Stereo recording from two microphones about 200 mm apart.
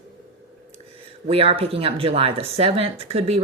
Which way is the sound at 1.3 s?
30° right (ahead or behind).